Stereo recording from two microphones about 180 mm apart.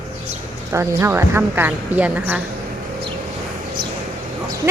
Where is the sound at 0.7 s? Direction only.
15° right (ahead or behind).